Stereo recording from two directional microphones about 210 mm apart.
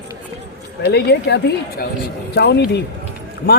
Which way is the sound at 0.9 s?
55° left (ahead or behind).